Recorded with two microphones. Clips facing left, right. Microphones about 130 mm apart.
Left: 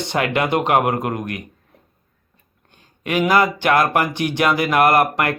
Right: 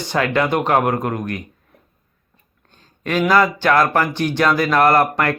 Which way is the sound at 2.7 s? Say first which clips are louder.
Right 1 dB; 15° left (ahead or behind).